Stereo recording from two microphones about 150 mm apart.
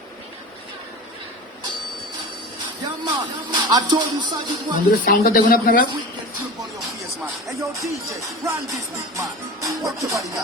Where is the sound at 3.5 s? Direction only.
25° right (ahead or behind).